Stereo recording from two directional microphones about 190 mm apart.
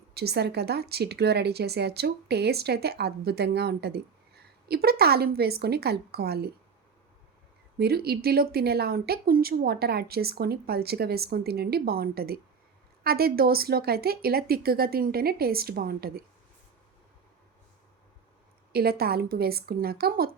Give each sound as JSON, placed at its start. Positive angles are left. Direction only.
{"t": 0.1, "sound": "a woman's voice", "side_deg": -60}
{"t": 7.8, "sound": "a woman's voice", "side_deg": -55}
{"t": 18.7, "sound": "a woman's voice", "side_deg": -55}